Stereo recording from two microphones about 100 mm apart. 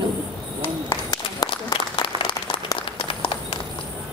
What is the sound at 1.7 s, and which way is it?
Applause, 60° left (ahead or behind).